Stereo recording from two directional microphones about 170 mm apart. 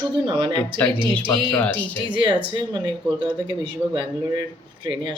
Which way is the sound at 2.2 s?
25° right (ahead or behind).